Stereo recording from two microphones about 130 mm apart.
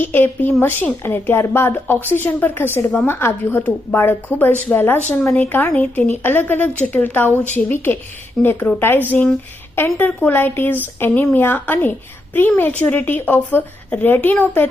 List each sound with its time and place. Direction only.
0.0 s a woman's voice: 15° left (ahead or behind)